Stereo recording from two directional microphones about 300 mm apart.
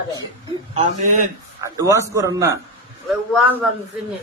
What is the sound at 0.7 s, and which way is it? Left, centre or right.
Speech, right.